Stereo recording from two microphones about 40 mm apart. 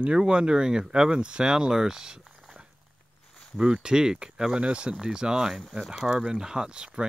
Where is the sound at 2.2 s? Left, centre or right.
Centre.